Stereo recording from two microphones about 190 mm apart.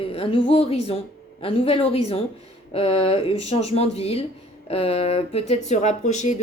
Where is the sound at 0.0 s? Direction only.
30° left (ahead or behind).